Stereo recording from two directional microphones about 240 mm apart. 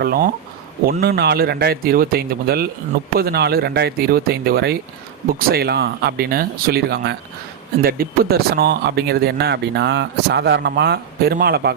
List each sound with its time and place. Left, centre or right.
0.0 s a man's voice: right